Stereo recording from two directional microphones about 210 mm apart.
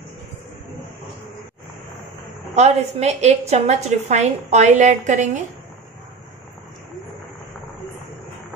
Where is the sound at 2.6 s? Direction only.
30° right (ahead or behind).